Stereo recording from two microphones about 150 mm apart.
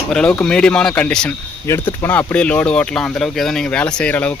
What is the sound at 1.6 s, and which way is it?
Speech, 15° left (ahead or behind).